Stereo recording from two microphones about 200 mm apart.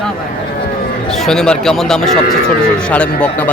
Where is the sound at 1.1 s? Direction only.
Centre (ahead or behind).